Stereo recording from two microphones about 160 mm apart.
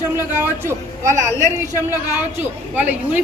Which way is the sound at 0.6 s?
15° right (ahead or behind).